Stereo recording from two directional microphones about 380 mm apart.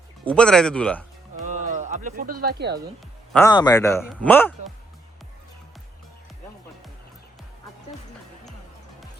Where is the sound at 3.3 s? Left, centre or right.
Centre.